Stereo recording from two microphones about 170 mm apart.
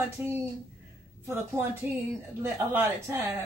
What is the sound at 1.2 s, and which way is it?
Speech, 10° right (ahead or behind).